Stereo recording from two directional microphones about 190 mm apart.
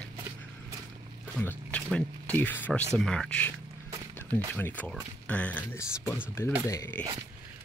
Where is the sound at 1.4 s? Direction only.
5° left (ahead or behind).